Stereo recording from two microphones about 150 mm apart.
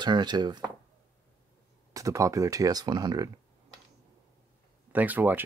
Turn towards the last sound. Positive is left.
turn(degrees=-10)  # may be behind; listen again after turning